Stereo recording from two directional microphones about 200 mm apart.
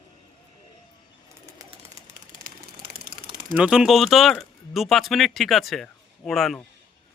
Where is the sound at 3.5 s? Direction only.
5° right (ahead or behind).